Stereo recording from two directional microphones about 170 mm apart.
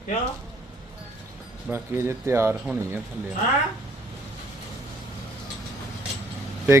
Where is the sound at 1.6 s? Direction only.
15° right (ahead or behind).